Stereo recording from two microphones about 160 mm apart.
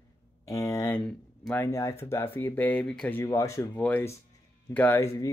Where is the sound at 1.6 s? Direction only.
20° left (ahead or behind).